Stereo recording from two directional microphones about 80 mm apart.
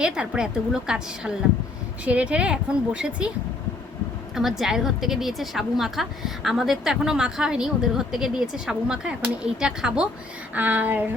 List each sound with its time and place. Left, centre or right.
0.0 s a woman's voice: centre
4.4 s a woman's voice: centre
10.5 s a sound: right